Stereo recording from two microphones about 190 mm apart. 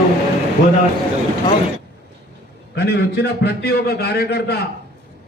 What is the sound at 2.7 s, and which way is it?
A man's voice, 65° left (ahead or behind).